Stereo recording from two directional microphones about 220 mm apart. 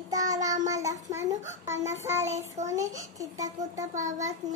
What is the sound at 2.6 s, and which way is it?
Speech, 30° right (ahead or behind).